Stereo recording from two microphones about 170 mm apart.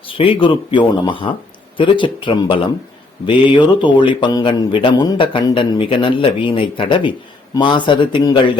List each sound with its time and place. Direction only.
0.1 s speech: 30° left (ahead or behind)